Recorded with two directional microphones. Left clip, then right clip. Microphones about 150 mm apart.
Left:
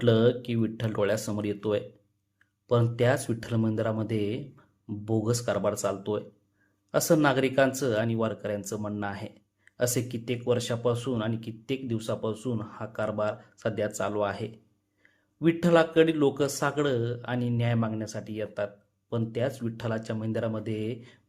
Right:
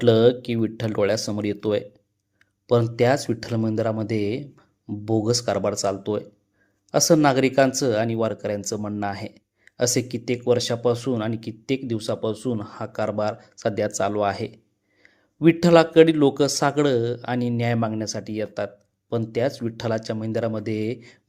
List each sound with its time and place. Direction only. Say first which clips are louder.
0.0 s speech: right 7 dB; 25° right (ahead or behind)